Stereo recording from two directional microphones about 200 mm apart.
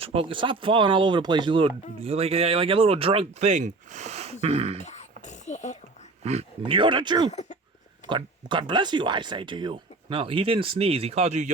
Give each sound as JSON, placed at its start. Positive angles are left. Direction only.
{"t": 0.0, "sound": "speech", "side_deg": -30}
{"t": 4.9, "sound": "a sound", "side_deg": 35}
{"t": 6.2, "sound": "speech", "side_deg": -30}
{"t": 7.3, "sound": "speech", "side_deg": 35}
{"t": 8.0, "sound": "speech", "side_deg": -25}